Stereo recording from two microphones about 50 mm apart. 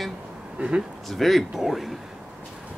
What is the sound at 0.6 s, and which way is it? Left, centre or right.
Speech, centre.